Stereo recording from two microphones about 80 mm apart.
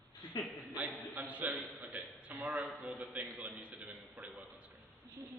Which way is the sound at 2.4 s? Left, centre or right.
Right.